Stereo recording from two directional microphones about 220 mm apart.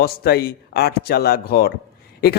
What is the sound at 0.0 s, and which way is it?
A man's voice, 45° left (ahead or behind).